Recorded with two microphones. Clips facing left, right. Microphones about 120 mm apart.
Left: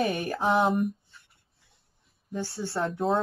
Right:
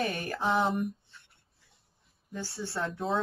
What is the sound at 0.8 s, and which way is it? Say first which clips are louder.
Writing: left 5 dB; centre (ahead or behind).